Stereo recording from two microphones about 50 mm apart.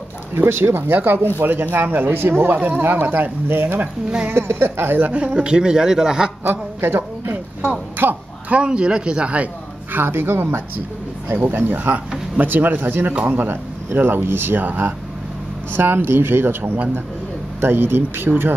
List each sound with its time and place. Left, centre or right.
0.4 s speech: right
4.3 s speech: right
5.1 s a man's voice: right
6.5 s a woman's voice: right
8.5 s speech: centre
9.9 s speech: right
11.3 s speech: right
13.5 s speech: right
17.6 s speech: right